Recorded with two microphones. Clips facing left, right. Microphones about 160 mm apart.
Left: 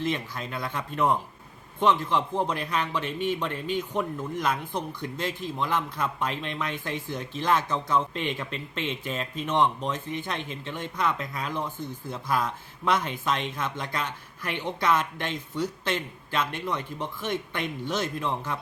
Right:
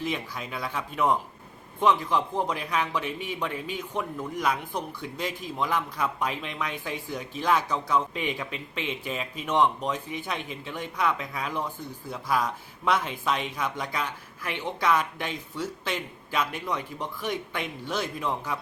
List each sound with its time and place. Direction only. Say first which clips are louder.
0.0 s a man's voice: left 2 dB; 5° right (ahead or behind)